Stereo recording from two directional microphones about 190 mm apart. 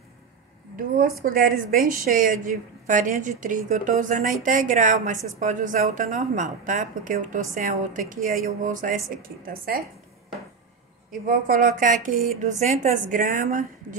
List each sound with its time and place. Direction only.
0.7 s a woman's voice: 50° right (ahead or behind)
11.1 s a woman's voice: 45° right (ahead or behind)